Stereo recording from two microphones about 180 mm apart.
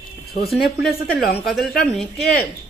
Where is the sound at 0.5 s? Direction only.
Centre (ahead or behind).